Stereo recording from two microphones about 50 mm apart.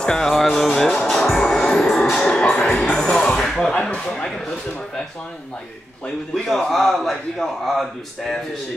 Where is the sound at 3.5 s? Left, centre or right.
Centre.